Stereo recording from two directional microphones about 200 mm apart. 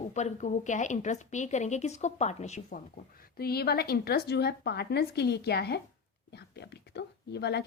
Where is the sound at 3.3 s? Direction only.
50° left (ahead or behind).